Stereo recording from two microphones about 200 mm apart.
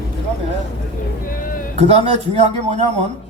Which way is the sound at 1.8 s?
30° right (ahead or behind).